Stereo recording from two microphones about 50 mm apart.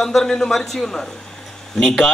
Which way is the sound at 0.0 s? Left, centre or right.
Centre.